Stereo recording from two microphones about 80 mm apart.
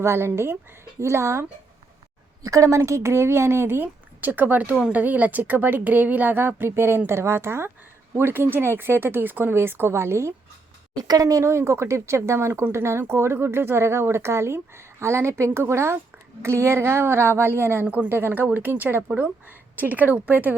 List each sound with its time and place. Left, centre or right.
0.0 s speech: right
10.9 s speech: right
17.8 s speech: centre